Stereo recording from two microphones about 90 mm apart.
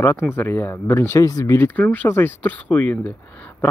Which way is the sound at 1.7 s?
15° left (ahead or behind).